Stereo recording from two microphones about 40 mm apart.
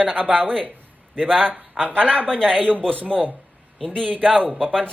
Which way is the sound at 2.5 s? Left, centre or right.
Right.